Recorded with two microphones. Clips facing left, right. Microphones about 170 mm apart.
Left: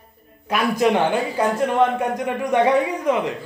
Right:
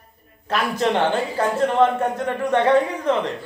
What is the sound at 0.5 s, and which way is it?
A man's voice, 10° left (ahead or behind).